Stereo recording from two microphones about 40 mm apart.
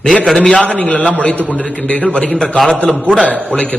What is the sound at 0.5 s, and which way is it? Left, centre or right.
A man's voice, left.